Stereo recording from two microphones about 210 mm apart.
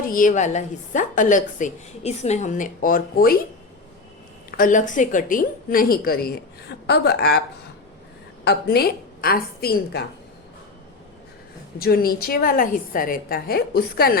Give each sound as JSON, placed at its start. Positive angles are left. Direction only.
{"t": 0.1, "sound": "a woman's voice", "side_deg": 40}
{"t": 4.5, "sound": "a woman's voice", "side_deg": 40}
{"t": 8.4, "sound": "a woman's voice", "side_deg": 50}
{"t": 11.8, "sound": "a woman's voice", "side_deg": 45}